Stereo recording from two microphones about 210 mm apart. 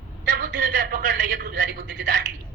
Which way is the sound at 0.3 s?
45° right (ahead or behind).